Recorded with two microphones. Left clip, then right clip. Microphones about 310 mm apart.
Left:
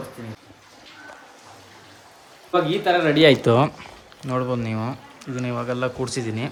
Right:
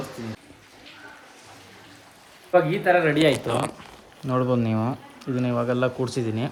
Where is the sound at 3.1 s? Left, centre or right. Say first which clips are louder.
Left 5 dB; left.